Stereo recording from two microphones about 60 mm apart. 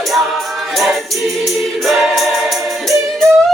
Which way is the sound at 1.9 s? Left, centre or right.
Centre.